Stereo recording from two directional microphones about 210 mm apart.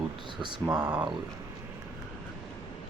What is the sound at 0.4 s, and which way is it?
Speech, 20° right (ahead or behind).